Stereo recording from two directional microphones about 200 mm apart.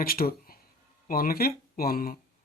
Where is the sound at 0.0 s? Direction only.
50° left (ahead or behind).